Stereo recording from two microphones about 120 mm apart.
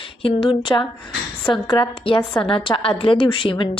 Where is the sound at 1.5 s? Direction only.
45° left (ahead or behind).